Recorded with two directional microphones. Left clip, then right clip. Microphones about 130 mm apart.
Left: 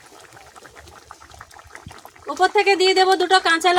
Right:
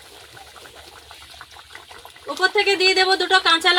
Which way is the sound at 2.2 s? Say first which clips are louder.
Left 2 dB; 40° left (ahead or behind).